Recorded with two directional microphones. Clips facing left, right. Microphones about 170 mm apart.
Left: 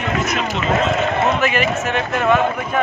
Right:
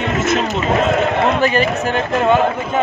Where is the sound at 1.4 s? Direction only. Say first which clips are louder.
Right 3 dB; 35° right (ahead or behind).